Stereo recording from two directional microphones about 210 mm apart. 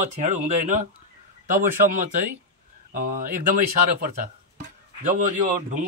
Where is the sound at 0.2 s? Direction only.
35° right (ahead or behind).